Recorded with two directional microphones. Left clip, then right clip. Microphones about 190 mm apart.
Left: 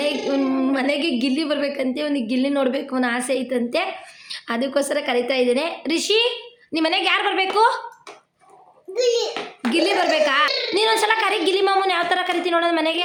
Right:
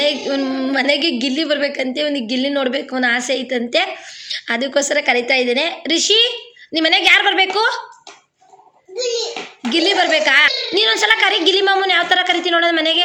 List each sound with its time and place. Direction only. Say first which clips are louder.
0.0 s a woman's voice: right 4 dB; centre (ahead or behind)
9.7 s a woman's voice: right 4 dB; 5° left (ahead or behind)